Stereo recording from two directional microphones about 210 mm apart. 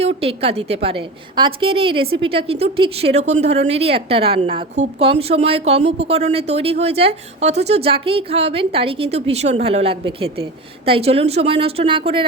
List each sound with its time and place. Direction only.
0.0 s a woman's voice: 30° right (ahead or behind)